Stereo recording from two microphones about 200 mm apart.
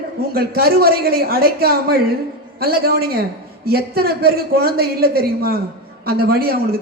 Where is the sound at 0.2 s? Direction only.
50° right (ahead or behind).